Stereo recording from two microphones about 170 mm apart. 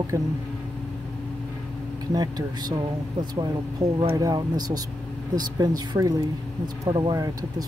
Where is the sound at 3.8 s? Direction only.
20° right (ahead or behind).